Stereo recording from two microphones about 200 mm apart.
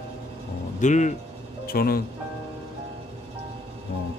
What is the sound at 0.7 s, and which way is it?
Speech, 35° left (ahead or behind).